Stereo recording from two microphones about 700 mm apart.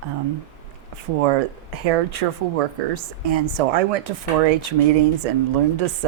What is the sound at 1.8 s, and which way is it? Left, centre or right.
Speech, right.